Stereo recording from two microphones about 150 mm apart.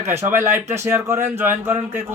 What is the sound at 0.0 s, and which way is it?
A man's voice, 15° right (ahead or behind).